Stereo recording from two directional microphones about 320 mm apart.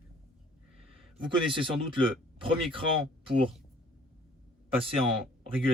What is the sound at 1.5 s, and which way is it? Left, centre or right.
Speech, centre.